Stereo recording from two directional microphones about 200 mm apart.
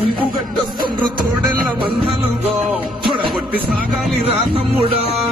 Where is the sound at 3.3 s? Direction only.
5° right (ahead or behind).